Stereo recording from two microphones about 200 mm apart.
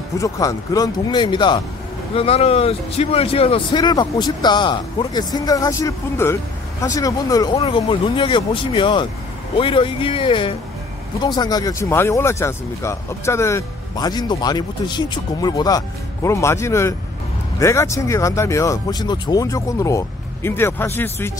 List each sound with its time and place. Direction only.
0.2 s speech: 15° left (ahead or behind)